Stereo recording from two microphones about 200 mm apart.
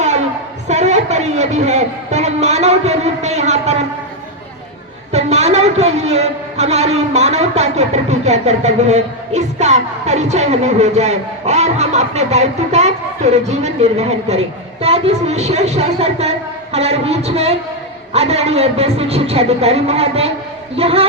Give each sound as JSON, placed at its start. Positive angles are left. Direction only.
{"t": 0.7, "sound": "a man's voice", "side_deg": -35}
{"t": 5.1, "sound": "a man's voice", "side_deg": -30}